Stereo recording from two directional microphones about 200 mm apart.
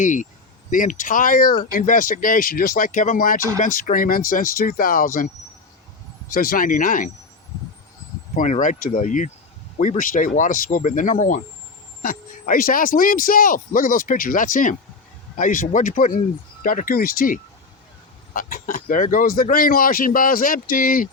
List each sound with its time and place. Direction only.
0.0 s speech: 40° left (ahead or behind)
8.4 s speech: 40° left (ahead or behind)